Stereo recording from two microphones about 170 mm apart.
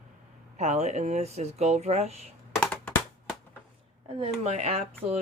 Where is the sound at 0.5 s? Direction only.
40° right (ahead or behind).